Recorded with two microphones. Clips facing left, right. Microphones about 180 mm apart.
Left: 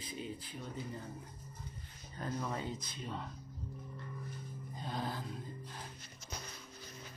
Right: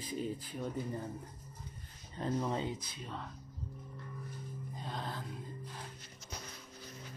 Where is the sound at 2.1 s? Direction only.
25° right (ahead or behind).